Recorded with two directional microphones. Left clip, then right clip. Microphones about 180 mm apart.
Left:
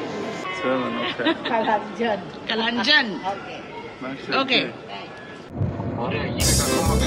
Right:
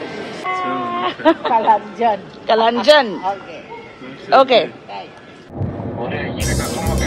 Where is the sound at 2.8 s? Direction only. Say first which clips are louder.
Right 6 dB; 5° left (ahead or behind).